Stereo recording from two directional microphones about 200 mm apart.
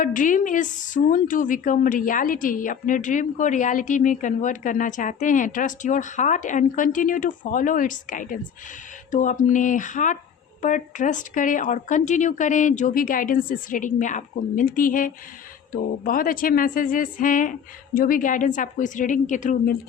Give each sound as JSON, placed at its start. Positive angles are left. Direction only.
{"t": 0.0, "sound": "a woman's voice", "side_deg": 40}